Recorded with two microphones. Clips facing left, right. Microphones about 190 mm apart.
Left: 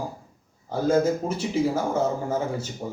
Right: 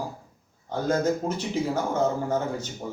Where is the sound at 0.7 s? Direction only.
10° left (ahead or behind).